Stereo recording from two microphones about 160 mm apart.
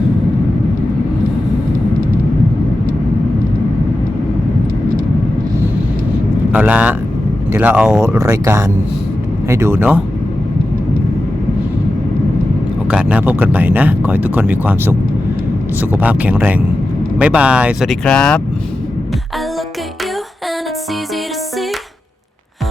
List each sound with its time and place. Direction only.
6.5 s speech: 10° right (ahead or behind)
8.0 s speech: 20° right (ahead or behind)
12.9 s speech: 5° right (ahead or behind)